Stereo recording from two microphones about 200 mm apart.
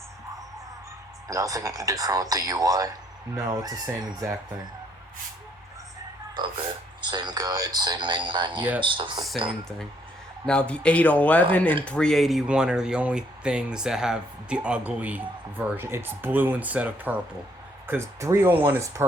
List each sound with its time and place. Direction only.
1.3 s speech: 15° right (ahead or behind)
6.4 s speech: 20° right (ahead or behind)
10.4 s a man's voice: 5° left (ahead or behind); by 19.0 s 15° right (ahead or behind)